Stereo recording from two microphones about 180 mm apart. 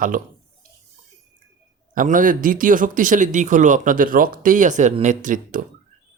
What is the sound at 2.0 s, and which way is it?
Speech, 50° right (ahead or behind).